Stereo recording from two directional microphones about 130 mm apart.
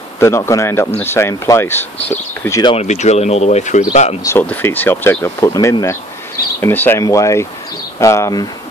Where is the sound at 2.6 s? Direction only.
50° left (ahead or behind).